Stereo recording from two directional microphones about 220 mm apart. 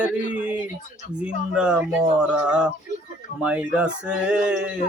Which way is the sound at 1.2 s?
5° right (ahead or behind).